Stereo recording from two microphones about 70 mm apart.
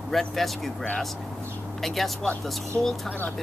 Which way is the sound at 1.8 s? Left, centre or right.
Centre.